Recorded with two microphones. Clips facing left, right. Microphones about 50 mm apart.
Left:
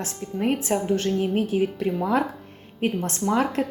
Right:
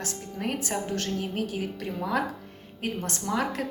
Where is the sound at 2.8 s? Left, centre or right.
Left.